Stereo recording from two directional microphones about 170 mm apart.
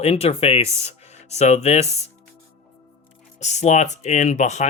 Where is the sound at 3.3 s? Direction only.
40° left (ahead or behind).